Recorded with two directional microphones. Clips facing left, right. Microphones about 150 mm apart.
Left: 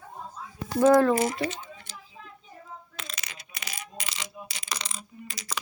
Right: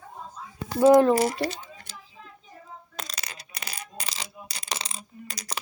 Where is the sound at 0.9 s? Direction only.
20° right (ahead or behind).